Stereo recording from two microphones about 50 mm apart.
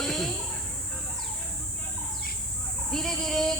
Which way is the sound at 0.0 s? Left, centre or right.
Centre.